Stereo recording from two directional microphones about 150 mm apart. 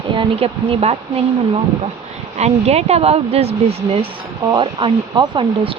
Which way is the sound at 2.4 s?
45° right (ahead or behind).